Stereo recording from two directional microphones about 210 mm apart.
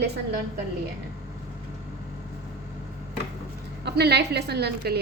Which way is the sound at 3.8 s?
50° right (ahead or behind).